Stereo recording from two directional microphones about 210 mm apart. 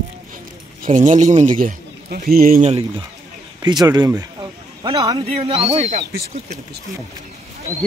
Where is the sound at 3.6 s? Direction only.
20° right (ahead or behind).